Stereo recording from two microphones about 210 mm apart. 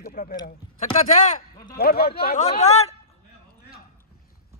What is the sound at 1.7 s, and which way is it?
Speech, 45° left (ahead or behind).